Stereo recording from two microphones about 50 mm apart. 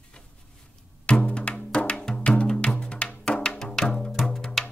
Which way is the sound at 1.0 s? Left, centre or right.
Left.